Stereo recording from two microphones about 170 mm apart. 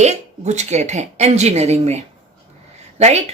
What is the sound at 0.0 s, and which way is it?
A woman's voice, 40° right (ahead or behind).